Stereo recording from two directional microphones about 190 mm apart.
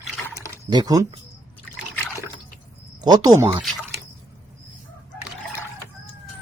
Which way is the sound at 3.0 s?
20° right (ahead or behind).